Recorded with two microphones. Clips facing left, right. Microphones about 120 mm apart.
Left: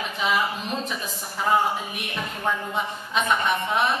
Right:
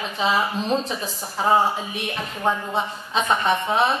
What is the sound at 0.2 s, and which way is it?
Speech, 30° right (ahead or behind).